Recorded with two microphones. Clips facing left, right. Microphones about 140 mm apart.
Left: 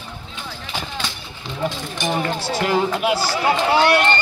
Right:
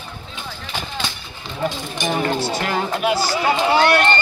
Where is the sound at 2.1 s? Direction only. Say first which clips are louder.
Right 2 dB; 10° left (ahead or behind).